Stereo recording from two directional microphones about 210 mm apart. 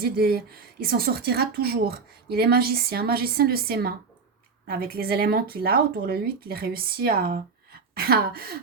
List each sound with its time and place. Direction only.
0.0 s speech: 45° right (ahead or behind)